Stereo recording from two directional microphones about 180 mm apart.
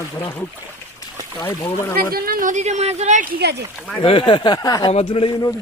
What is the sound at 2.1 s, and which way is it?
Speech, 55° right (ahead or behind).